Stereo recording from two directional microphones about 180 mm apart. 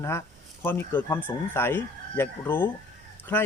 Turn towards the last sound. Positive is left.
turn(degrees=10)  # may be behind; listen again after turning